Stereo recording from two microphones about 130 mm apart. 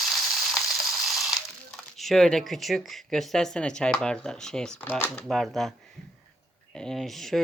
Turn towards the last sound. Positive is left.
turn(degrees=0)  # may be behind; listen again after turning